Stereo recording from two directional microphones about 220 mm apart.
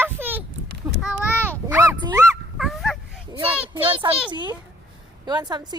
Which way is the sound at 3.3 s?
25° right (ahead or behind).